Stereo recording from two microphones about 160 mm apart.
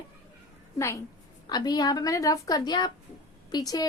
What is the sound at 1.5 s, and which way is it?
A woman's voice, 25° left (ahead or behind).